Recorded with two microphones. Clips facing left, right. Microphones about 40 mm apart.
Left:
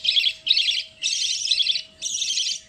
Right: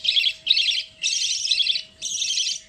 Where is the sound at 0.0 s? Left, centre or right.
Centre.